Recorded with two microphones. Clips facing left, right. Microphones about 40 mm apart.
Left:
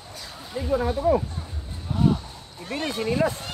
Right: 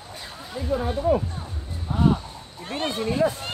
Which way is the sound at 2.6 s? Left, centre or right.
Right.